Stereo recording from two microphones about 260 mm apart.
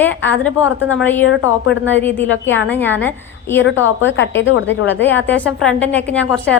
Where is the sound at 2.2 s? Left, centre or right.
Left.